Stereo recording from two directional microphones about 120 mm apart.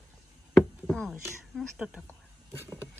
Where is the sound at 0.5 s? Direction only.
5° left (ahead or behind).